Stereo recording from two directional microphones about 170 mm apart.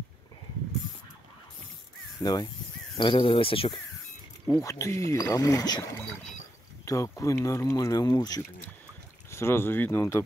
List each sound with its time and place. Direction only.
2.2 s speech: 25° left (ahead or behind)
4.6 s speech: 20° left (ahead or behind)